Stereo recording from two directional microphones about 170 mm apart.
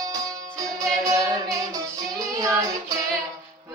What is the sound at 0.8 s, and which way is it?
Music, 20° right (ahead or behind).